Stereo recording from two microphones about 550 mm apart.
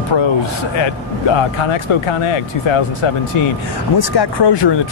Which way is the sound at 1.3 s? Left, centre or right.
Left.